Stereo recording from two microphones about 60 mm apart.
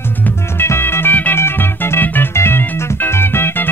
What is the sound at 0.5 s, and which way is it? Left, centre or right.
Music, left.